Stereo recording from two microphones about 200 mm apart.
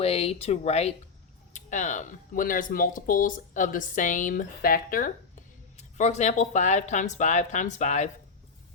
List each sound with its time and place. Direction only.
0.0 s speech: 30° left (ahead or behind)